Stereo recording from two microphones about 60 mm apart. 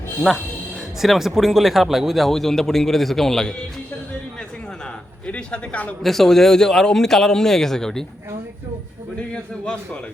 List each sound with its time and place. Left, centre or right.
0.3 s speech: centre
5.2 s a man's voice: left
6.0 s a man's voice: centre
9.1 s a man's voice: centre